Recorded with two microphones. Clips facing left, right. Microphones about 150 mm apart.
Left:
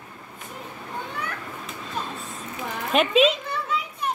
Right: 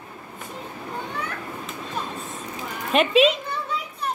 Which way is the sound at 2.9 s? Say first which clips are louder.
Right 1 dB; centre (ahead or behind).